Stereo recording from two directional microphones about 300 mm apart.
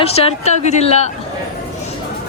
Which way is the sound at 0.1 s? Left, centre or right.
Left.